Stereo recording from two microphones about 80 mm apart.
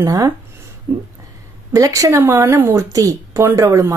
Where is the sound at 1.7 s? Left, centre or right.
Right.